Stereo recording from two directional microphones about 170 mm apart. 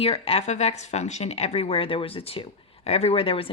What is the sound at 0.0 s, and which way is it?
A woman's voice, 35° left (ahead or behind).